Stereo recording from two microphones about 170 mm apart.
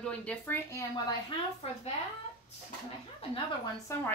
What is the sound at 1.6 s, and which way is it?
Speech, 35° left (ahead or behind).